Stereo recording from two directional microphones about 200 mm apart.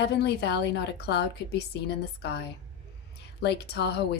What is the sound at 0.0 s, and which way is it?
A woman's voice, 55° left (ahead or behind).